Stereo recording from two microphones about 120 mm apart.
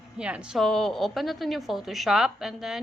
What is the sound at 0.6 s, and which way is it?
A woman's voice, 5° left (ahead or behind).